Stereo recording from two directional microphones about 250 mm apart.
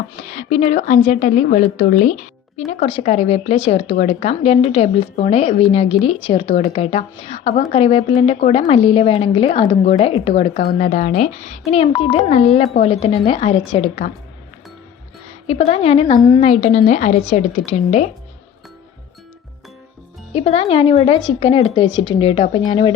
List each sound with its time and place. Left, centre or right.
0.3 s speech: left
15.4 s speech: left
20.3 s speech: left